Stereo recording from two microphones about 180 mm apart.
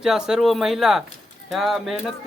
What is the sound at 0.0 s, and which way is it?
Speech, 5° right (ahead or behind).